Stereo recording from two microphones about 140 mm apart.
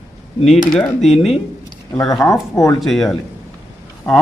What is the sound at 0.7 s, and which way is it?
Speech, 5° left (ahead or behind).